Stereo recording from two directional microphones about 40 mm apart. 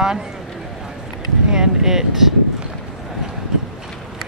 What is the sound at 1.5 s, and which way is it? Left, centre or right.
Speech, centre.